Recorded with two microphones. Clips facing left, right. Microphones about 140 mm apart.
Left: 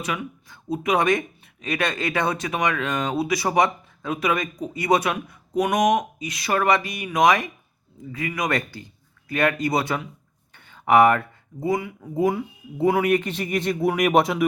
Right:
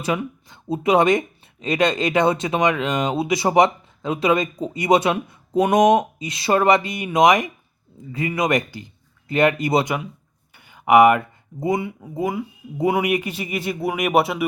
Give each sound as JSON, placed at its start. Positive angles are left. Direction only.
{"t": 0.0, "sound": "a man's voice", "side_deg": -30}
{"t": 12.1, "sound": "speech", "side_deg": -5}
{"t": 12.7, "sound": "a man's voice", "side_deg": -15}